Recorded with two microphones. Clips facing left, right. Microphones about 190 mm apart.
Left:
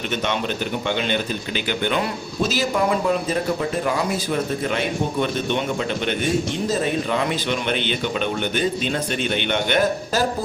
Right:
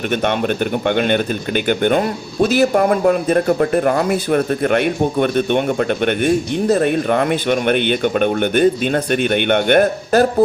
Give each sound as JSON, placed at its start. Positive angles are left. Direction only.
{"t": 0.3, "sound": "speech", "side_deg": -55}